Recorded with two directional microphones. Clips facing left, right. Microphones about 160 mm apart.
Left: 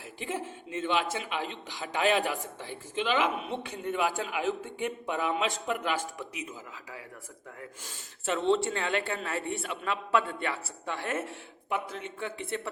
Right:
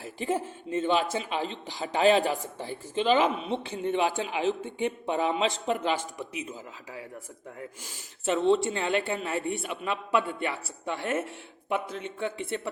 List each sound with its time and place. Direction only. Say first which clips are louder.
0.0 s speech: right 6 dB; 35° right (ahead or behind)
8.2 s speech: right 3 dB; 15° right (ahead or behind)